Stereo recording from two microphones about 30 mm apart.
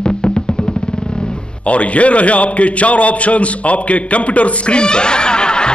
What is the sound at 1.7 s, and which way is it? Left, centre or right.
A man's voice, left.